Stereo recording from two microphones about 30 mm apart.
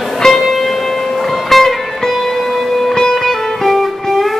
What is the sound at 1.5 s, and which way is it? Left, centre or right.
Music, centre.